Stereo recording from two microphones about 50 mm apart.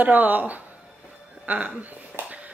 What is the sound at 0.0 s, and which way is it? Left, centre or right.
Speech, right.